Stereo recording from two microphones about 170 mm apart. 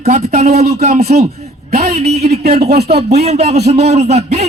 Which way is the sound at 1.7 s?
70° right (ahead or behind).